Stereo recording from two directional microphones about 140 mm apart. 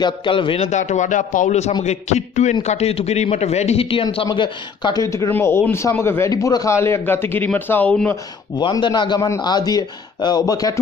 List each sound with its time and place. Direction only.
0.0 s a man's voice: 35° left (ahead or behind)
0.7 s a man's voice: 60° left (ahead or behind); by 5.0 s 30° left (ahead or behind)
5.0 s a man's voice: 20° left (ahead or behind)
8.5 s a man's voice: 35° left (ahead or behind)